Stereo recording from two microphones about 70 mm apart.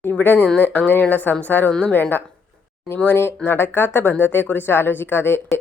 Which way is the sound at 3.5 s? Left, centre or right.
Left.